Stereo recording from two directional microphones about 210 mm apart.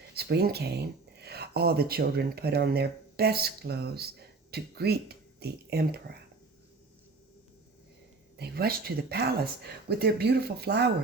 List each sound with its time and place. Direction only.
0.1 s speech: 50° right (ahead or behind)
8.4 s speech: 50° right (ahead or behind)